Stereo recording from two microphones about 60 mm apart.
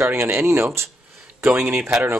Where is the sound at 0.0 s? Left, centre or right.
Right.